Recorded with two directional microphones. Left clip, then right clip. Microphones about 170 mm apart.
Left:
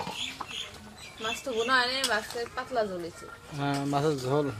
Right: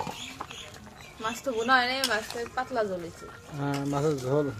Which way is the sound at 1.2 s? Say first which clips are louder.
Even; 25° right (ahead or behind).